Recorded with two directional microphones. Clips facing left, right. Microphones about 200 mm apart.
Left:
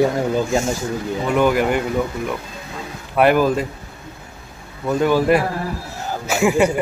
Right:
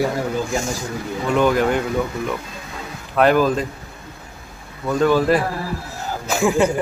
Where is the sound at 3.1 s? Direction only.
10° left (ahead or behind).